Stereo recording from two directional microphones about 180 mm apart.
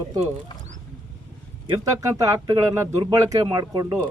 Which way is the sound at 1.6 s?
20° right (ahead or behind).